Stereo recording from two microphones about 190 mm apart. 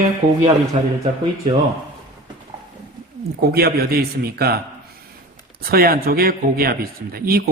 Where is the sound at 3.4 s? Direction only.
55° right (ahead or behind).